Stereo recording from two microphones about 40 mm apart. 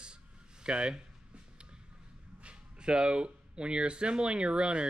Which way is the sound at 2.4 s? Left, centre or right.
Right.